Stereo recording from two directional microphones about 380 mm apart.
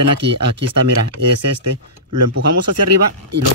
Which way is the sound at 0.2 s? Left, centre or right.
Right.